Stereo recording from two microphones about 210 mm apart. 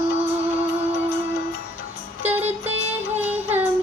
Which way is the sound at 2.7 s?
30° right (ahead or behind).